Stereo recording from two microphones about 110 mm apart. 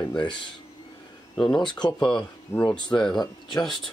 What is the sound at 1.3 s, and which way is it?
Speech, 5° left (ahead or behind).